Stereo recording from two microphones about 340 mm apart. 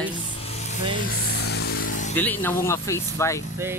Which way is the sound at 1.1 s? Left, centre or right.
Left.